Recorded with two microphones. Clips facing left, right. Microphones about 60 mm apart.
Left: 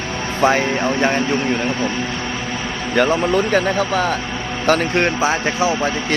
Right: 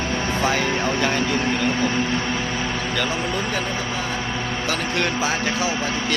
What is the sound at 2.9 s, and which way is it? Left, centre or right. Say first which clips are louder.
A man's voice: left 12 dB; left.